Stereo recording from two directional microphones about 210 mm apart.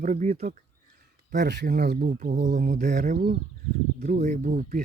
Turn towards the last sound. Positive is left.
turn(degrees=-35)  # may be behind; listen again after turning